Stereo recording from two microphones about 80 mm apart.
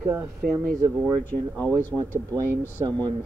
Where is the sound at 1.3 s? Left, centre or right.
Left.